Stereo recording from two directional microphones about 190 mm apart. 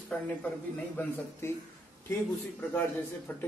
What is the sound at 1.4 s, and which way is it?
Speech, 15° left (ahead or behind).